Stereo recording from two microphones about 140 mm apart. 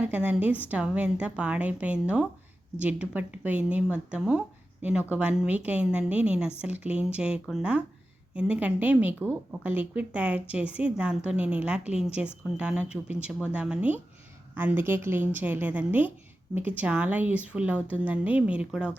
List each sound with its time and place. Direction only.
0.0 s speech: 10° right (ahead or behind)